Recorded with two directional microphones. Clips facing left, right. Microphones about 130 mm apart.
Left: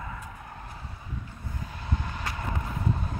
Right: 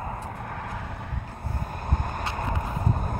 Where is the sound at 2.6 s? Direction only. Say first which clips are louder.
Right 2 dB; 45° right (ahead or behind).